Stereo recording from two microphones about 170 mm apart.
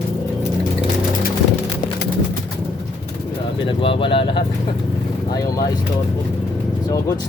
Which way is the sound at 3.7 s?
30° left (ahead or behind).